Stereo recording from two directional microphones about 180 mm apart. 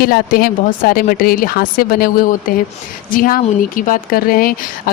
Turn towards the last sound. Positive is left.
turn(degrees=55)  # may be behind; listen again after turning